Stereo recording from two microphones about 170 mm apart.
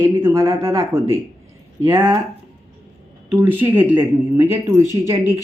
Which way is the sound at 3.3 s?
10° right (ahead or behind).